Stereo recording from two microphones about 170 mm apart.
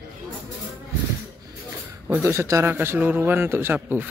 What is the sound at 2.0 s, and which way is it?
Speech, 10° right (ahead or behind).